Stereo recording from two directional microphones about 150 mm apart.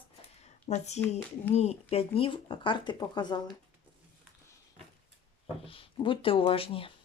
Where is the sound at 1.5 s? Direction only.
45° left (ahead or behind); by 3.4 s 30° left (ahead or behind).